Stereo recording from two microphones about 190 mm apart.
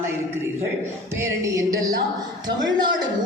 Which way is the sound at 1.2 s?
15° right (ahead or behind).